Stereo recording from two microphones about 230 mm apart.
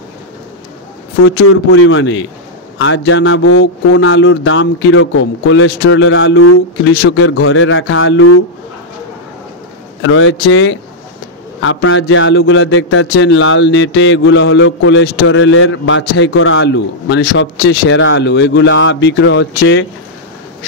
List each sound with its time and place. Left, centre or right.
1.2 s speech: left
7.0 s speech: left
10.0 s a man's voice: left